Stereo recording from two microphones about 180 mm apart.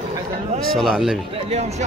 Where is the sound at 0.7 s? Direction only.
Centre (ahead or behind).